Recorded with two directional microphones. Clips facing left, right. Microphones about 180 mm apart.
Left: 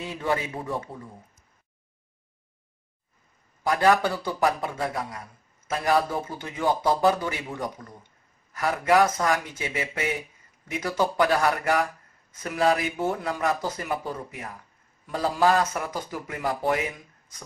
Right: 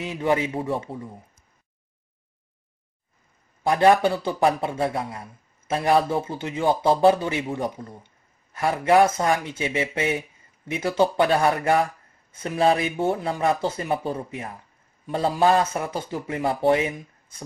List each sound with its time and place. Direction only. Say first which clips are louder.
0.0 s speech: right 5 dB; 20° right (ahead or behind)
3.6 s speech: right 4 dB; 25° right (ahead or behind)